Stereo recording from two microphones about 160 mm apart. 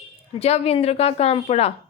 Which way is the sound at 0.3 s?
40° left (ahead or behind).